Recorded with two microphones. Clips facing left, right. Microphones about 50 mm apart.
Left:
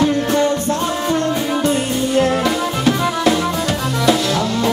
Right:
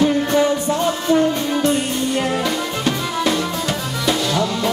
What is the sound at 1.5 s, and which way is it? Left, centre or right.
Music, centre.